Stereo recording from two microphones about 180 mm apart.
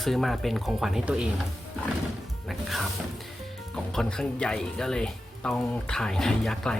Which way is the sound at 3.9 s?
5° left (ahead or behind).